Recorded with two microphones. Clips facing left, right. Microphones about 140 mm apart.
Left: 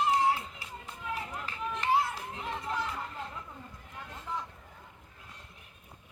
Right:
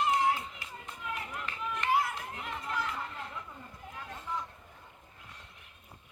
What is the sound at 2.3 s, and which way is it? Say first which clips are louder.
Chatter: left 3 dB; 25° left (ahead or behind).